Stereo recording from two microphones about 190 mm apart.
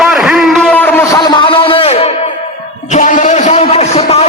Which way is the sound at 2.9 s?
40° left (ahead or behind).